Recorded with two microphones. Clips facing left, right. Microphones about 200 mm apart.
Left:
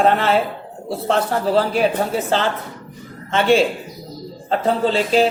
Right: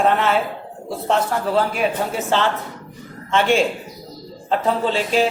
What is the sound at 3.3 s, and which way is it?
A man's voice, 35° left (ahead or behind).